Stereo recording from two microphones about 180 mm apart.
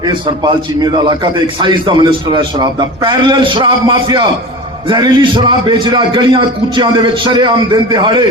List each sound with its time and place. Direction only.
0.0 s a man's voice: 25° right (ahead or behind)